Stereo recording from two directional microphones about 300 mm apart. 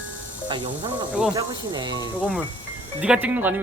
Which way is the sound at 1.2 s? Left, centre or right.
Centre.